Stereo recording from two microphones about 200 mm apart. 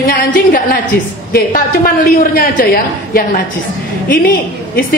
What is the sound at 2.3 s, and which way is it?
Speech, 45° left (ahead or behind).